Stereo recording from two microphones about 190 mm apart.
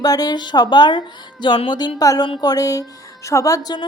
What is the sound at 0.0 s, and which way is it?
Speech, 20° left (ahead or behind).